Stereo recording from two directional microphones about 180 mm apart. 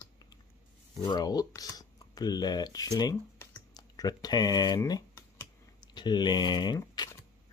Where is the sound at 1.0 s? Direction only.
20° left (ahead or behind).